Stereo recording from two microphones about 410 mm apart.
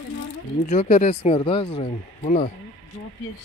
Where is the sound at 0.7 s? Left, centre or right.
Centre.